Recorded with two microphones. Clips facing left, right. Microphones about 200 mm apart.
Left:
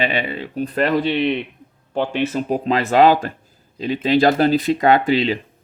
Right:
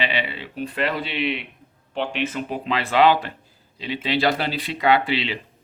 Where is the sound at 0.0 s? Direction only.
50° left (ahead or behind).